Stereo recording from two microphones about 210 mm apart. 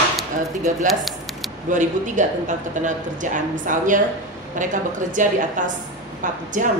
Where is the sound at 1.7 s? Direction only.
35° right (ahead or behind).